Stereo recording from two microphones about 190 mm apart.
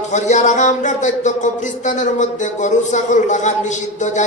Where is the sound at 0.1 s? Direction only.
40° left (ahead or behind).